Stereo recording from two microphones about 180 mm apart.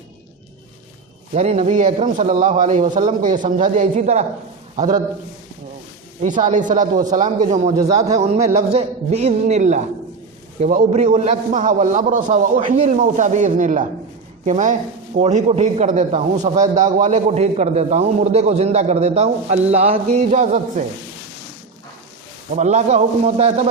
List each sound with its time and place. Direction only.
1.3 s a man's voice: 35° right (ahead or behind)
6.2 s a man's voice: 45° right (ahead or behind)
12.9 s a man's voice: 45° right (ahead or behind)
22.5 s a man's voice: 40° right (ahead or behind)